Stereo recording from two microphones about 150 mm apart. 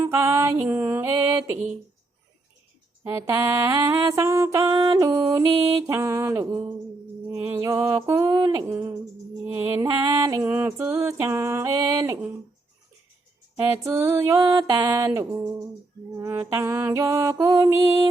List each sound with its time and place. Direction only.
0.0 s music: 15° right (ahead or behind)
3.0 s music: 20° right (ahead or behind)
13.6 s music: 20° right (ahead or behind)